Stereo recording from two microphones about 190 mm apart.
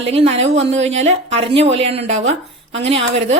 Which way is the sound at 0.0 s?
30° right (ahead or behind).